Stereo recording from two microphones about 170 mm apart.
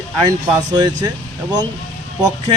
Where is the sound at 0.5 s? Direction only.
25° right (ahead or behind).